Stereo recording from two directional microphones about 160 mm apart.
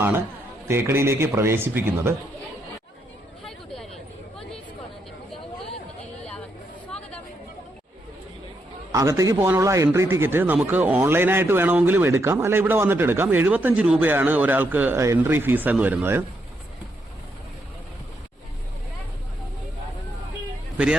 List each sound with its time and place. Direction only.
0.7 s a man's voice: 15° right (ahead or behind)
6.9 s chatter: 5° left (ahead or behind)
8.9 s a man's voice: 20° right (ahead or behind)